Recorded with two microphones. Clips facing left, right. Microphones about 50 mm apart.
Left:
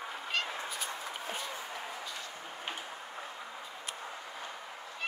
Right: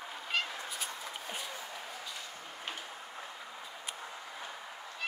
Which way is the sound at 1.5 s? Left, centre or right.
Left.